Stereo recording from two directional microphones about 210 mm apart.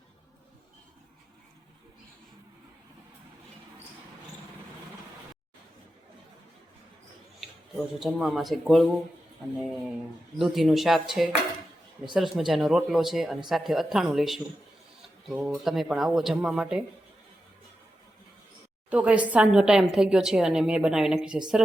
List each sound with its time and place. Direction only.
7.9 s a woman's voice: centre (ahead or behind)
10.3 s a woman's voice: centre (ahead or behind)
18.9 s a woman's voice: 5° right (ahead or behind)